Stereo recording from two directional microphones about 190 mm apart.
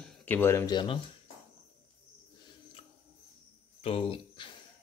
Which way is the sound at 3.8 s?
30° left (ahead or behind).